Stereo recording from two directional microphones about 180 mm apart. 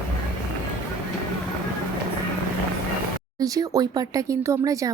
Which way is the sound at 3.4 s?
20° right (ahead or behind).